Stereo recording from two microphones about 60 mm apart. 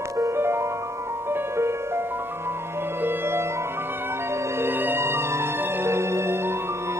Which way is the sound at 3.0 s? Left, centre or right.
Right.